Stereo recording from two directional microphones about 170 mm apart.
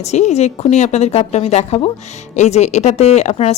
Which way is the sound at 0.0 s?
40° left (ahead or behind).